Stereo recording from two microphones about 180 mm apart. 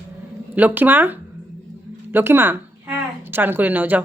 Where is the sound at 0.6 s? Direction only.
10° right (ahead or behind).